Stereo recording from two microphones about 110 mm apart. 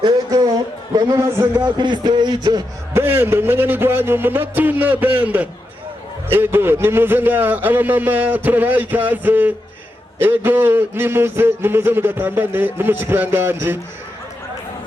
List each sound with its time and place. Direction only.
0.0 s a sound: 40° right (ahead or behind)
0.9 s speech: 30° right (ahead or behind)
1.5 s speech: 45° right (ahead or behind)
2.9 s a man's voice: 20° right (ahead or behind)